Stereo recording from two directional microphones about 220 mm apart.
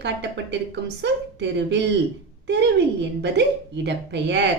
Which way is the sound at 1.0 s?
50° right (ahead or behind).